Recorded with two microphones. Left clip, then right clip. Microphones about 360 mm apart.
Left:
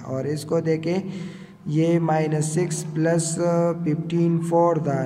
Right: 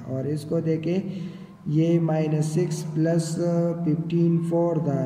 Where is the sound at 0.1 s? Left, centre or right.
Centre.